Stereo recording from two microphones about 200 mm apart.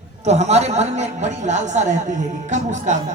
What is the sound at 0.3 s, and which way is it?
A man's voice, 35° right (ahead or behind).